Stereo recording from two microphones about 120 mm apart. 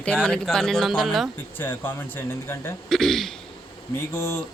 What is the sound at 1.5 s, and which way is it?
Speech, 20° left (ahead or behind).